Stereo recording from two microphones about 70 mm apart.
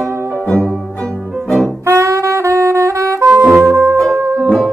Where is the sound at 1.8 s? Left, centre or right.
Right.